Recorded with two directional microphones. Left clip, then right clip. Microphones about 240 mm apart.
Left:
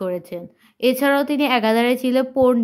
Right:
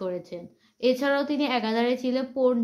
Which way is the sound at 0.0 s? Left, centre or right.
Left.